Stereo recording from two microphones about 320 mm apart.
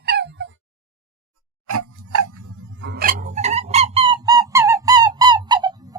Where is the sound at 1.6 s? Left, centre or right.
Right.